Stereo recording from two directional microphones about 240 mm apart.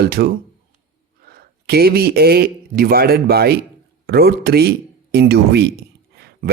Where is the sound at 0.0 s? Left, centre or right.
Right.